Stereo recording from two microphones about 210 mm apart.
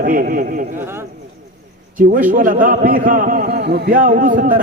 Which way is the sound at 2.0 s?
40° right (ahead or behind).